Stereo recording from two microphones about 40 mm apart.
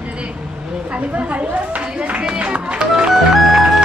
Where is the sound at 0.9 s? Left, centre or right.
Right.